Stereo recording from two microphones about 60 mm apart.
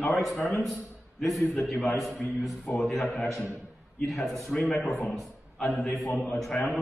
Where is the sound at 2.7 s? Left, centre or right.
Left.